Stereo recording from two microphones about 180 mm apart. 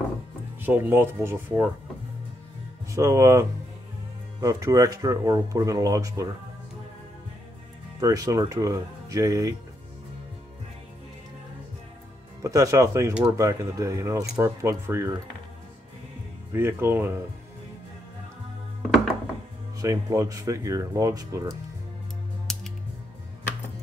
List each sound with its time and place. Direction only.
0.6 s speech: 10° right (ahead or behind)
2.9 s speech: 15° right (ahead or behind)
8.0 s speech: 20° right (ahead or behind)
12.4 s speech: 15° right (ahead or behind)
16.5 s speech: 10° right (ahead or behind)
19.8 s speech: 15° right (ahead or behind)
22.5 s music: 5° left (ahead or behind)